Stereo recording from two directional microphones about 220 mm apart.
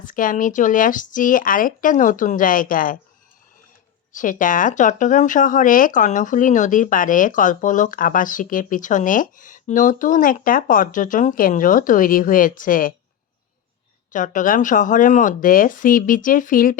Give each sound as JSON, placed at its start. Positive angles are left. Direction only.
{"t": 0.0, "sound": "speech", "side_deg": 35}
{"t": 4.1, "sound": "speech", "side_deg": 35}
{"t": 14.1, "sound": "speech", "side_deg": 35}